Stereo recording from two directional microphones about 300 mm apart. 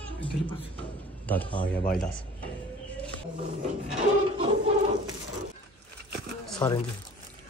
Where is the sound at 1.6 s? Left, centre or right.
Left.